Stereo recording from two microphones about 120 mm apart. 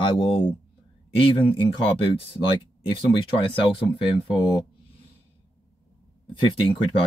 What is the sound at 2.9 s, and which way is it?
Speech, 40° left (ahead or behind).